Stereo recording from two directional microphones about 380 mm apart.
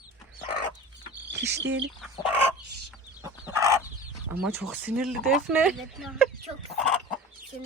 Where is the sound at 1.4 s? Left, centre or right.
Right.